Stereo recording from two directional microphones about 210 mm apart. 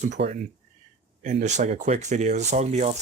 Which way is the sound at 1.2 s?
35° right (ahead or behind).